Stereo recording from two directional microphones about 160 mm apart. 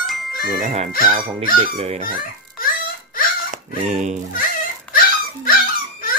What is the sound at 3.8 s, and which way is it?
Fowl, 50° right (ahead or behind).